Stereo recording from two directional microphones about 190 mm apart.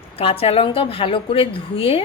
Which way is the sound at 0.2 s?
30° left (ahead or behind).